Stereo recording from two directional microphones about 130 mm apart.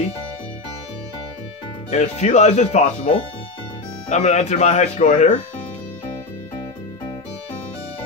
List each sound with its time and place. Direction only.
1.9 s speech: 60° left (ahead or behind)
4.1 s speech: 65° left (ahead or behind)